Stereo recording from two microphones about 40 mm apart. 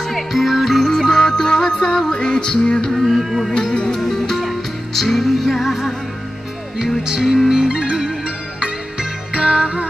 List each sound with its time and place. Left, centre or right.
0.1 s music: centre; by 2.5 s left
2.8 s a sound: centre
3.2 s music: centre
3.5 s music: left
4.0 s music: centre
6.8 s speech: centre
9.4 s music: centre